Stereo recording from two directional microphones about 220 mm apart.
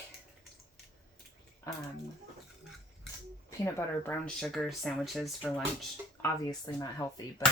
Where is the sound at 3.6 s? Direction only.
10° left (ahead or behind).